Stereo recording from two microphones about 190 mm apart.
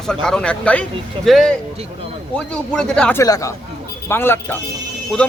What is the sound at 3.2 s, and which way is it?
Speech, 15° left (ahead or behind).